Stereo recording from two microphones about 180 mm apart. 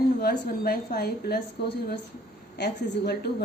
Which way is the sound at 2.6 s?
65° left (ahead or behind).